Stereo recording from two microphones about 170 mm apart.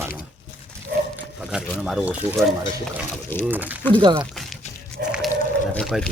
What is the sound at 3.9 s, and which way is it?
Speech, 30° right (ahead or behind).